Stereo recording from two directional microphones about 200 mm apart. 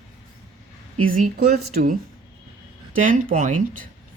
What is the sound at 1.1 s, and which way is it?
Speech, 45° right (ahead or behind).